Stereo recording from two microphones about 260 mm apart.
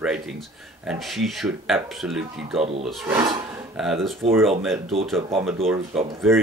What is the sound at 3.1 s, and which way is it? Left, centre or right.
Speech, centre.